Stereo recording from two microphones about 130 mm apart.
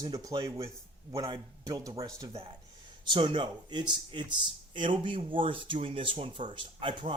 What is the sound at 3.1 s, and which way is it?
Speech, 40° right (ahead or behind).